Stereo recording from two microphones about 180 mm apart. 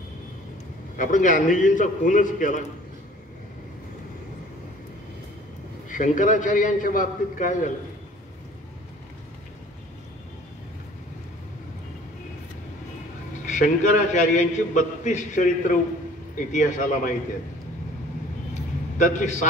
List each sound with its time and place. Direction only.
0.9 s a man's voice: 45° left (ahead or behind)
5.9 s a man's voice: 45° left (ahead or behind)
13.5 s a man's voice: 45° left (ahead or behind)
18.9 s a man's voice: 45° left (ahead or behind)